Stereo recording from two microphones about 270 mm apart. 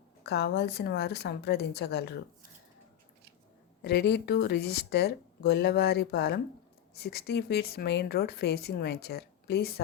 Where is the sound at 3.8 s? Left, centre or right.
Left.